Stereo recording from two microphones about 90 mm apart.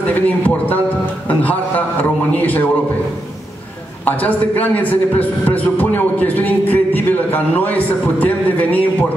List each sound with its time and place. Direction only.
0.1 s a man's voice: 20° left (ahead or behind)
4.0 s a man's voice: 20° left (ahead or behind)